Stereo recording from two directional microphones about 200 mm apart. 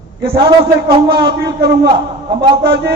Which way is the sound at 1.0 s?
55° right (ahead or behind).